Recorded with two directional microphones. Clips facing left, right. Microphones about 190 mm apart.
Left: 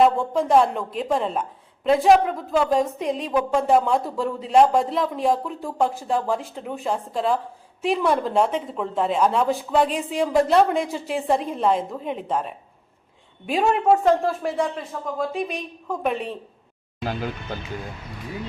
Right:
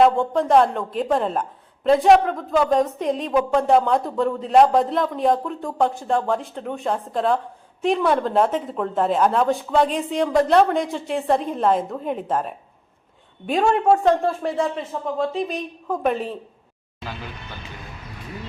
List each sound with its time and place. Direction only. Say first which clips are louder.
0.0 s a woman's voice: right 2 dB; centre (ahead or behind)
14.0 s a woman's voice: right 1 dB; 5° left (ahead or behind)
17.0 s speech: left 7 dB; 45° left (ahead or behind)